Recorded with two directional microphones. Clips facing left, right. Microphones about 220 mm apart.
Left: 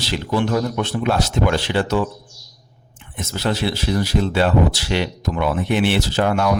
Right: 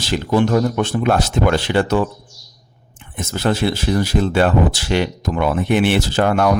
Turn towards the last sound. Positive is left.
turn(degrees=-50)  # may be behind; listen again after turning